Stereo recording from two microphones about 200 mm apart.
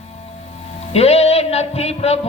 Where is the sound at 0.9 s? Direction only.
30° left (ahead or behind).